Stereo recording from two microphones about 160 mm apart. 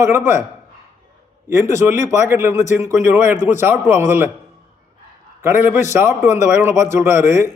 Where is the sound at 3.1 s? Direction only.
50° left (ahead or behind).